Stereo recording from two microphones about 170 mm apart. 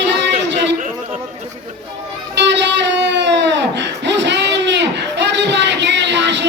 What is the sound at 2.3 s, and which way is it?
Music, 90° right.